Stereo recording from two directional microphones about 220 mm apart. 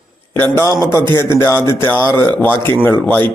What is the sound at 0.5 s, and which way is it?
A man's voice, 15° left (ahead or behind).